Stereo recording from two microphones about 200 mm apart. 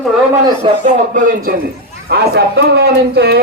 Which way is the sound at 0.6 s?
40° right (ahead or behind).